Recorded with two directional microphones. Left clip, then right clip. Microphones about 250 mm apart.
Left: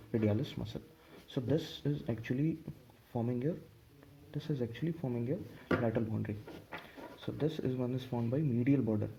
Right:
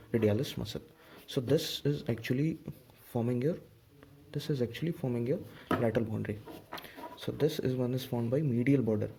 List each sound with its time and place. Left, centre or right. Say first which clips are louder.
0.1 s speech: right 5 dB; right